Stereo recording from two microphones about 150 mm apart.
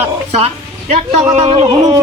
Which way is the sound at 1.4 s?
45° right (ahead or behind).